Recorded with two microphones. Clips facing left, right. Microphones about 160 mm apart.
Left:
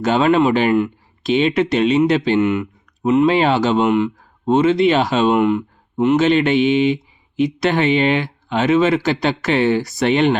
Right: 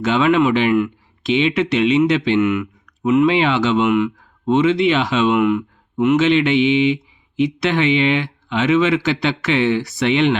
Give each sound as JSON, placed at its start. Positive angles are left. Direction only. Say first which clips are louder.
{"t": 0.0, "sound": "speech", "louder": "left 1 dB", "side_deg": 40}